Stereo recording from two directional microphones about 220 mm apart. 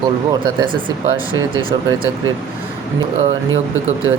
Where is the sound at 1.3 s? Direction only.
70° right (ahead or behind).